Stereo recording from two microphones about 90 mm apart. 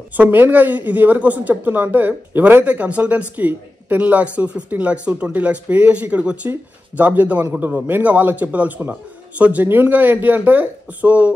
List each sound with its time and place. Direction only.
0.2 s a man's voice: 20° right (ahead or behind)